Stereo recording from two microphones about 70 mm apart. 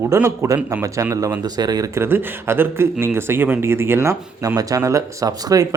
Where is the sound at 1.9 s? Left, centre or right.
Right.